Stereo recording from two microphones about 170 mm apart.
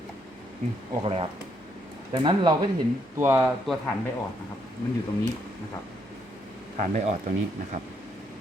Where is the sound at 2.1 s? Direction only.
25° right (ahead or behind).